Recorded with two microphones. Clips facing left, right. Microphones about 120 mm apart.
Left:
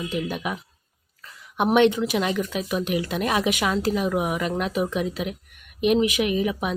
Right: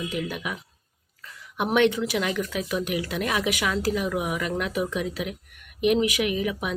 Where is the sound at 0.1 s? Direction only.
25° left (ahead or behind).